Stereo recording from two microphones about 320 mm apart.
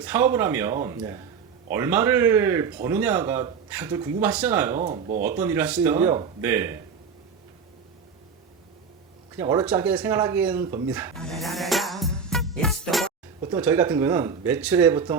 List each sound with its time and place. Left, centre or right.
0.0 s speech: centre
4.8 s speech: right
5.2 s speech: centre
9.3 s speech: centre